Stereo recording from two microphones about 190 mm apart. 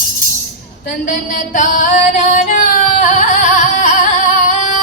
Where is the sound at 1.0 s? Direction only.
40° left (ahead or behind).